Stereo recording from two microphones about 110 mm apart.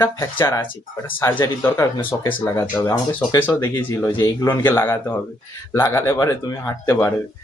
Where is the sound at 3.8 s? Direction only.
25° left (ahead or behind).